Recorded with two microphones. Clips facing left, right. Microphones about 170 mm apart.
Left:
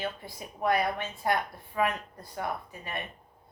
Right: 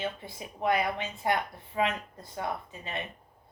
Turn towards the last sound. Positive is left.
turn(degrees=-20)  # may be behind; listen again after turning